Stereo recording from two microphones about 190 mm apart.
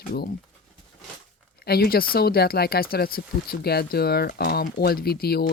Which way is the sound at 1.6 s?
55° left (ahead or behind).